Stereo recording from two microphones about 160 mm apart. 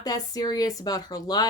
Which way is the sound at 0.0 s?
25° left (ahead or behind).